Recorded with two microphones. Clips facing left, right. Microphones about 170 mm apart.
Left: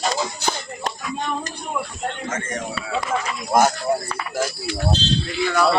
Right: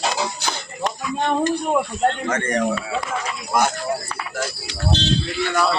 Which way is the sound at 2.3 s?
70° right (ahead or behind).